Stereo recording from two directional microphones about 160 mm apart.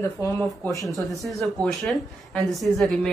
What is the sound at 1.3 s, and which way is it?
A woman's voice, centre (ahead or behind).